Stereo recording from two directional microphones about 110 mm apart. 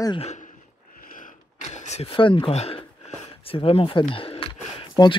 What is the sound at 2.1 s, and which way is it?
Speech, 50° left (ahead or behind).